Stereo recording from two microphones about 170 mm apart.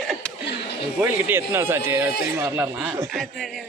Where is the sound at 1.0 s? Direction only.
10° right (ahead or behind).